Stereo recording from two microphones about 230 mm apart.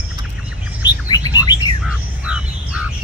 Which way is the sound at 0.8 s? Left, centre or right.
Centre.